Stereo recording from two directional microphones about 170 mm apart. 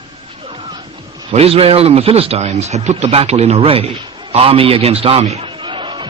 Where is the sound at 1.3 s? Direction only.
35° right (ahead or behind).